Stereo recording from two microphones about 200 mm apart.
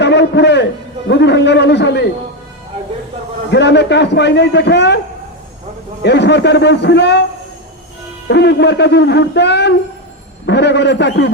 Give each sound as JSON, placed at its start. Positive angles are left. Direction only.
{"t": 0.0, "sound": "a man's voice", "side_deg": 60}
{"t": 3.5, "sound": "a man's voice", "side_deg": 60}
{"t": 6.0, "sound": "a man's voice", "side_deg": 60}
{"t": 8.3, "sound": "a man's voice", "side_deg": 60}